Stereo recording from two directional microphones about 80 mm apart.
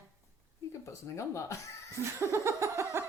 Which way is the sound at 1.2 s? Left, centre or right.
Left.